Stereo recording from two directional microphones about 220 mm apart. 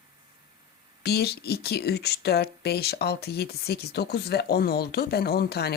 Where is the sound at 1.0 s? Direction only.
45° left (ahead or behind).